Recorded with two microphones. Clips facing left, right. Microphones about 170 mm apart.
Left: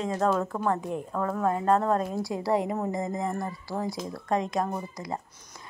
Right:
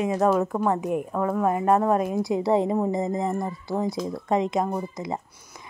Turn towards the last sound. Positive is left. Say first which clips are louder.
# right 4 dB
turn(degrees=-20)  # may be behind; listen again after turning